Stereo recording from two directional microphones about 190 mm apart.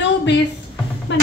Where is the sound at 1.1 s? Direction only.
70° left (ahead or behind).